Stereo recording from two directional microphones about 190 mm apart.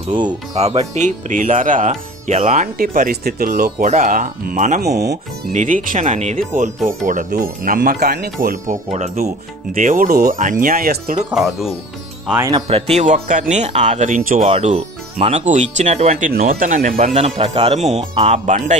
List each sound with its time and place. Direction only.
0.2 s speech: 35° right (ahead or behind); by 5.1 s 55° right (ahead or behind)
5.5 s speech: 40° right (ahead or behind)
11.2 s speech: centre (ahead or behind)
12.4 s speech: 25° right (ahead or behind)
16.3 s speech: 50° right (ahead or behind)